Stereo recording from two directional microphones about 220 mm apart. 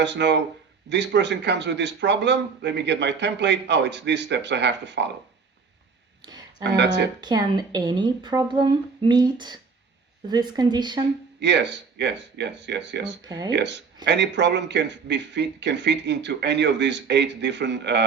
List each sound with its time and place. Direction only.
0.0 s a man's voice: 50° right (ahead or behind)
6.6 s a man's voice: 50° right (ahead or behind)
7.2 s a woman's voice: 20° right (ahead or behind)
11.3 s a man's voice: 50° right (ahead or behind)
13.2 s speech: 20° right (ahead or behind)
13.5 s a man's voice: 50° right (ahead or behind)